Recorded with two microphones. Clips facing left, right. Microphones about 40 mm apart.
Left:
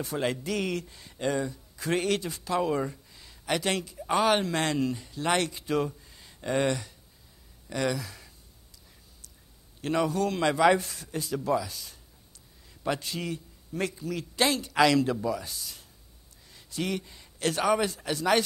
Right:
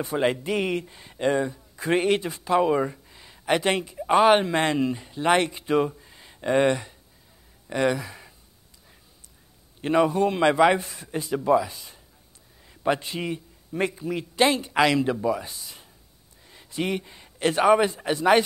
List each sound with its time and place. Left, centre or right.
0.0 s speech: right
9.8 s a man's voice: right